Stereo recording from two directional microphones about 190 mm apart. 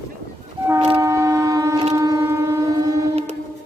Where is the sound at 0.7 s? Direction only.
25° right (ahead or behind).